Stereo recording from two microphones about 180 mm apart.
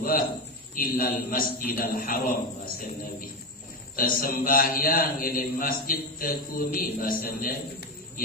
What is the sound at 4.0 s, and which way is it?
A man's voice, 50° left (ahead or behind).